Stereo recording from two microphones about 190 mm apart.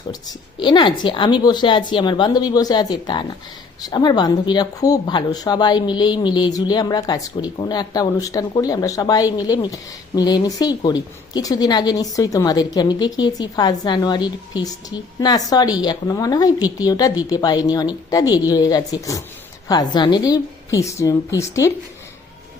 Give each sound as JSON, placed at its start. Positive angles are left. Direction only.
{"t": 0.1, "sound": "speech", "side_deg": 20}